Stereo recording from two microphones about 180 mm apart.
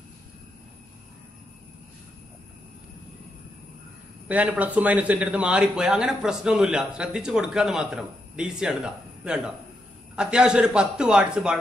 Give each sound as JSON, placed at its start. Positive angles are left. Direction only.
{"t": 4.3, "sound": "speech", "side_deg": -10}